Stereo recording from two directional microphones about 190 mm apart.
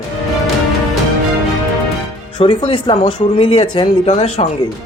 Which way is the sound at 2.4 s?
25° left (ahead or behind).